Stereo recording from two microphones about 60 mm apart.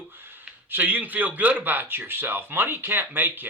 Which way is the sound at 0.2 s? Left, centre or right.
Right.